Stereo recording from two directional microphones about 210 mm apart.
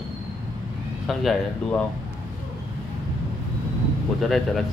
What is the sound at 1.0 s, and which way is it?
Speech, centre (ahead or behind).